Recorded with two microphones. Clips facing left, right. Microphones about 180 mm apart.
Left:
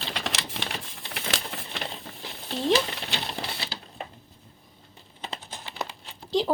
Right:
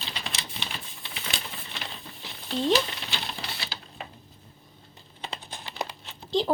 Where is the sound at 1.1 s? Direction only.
85° left.